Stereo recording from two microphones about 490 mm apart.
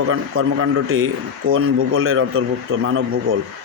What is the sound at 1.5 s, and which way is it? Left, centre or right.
Speech, right.